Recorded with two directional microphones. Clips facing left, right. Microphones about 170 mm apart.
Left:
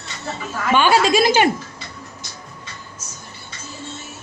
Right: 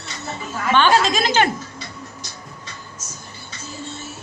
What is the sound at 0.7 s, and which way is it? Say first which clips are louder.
Speech: left 1 dB; 10° left (ahead or behind).